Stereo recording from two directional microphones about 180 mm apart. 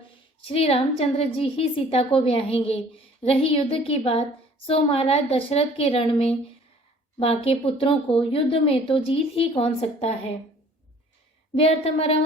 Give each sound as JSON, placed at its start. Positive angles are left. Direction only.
{"t": 0.4, "sound": "a woman's voice", "side_deg": 35}
{"t": 11.5, "sound": "a woman's voice", "side_deg": 35}